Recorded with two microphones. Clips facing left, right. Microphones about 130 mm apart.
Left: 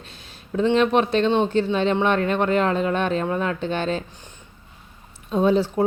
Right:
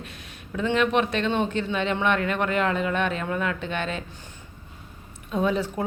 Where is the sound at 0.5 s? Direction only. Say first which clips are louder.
Left 4 dB; 30° left (ahead or behind).